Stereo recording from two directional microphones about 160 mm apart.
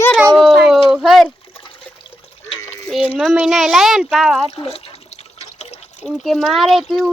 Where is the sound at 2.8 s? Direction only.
Centre (ahead or behind).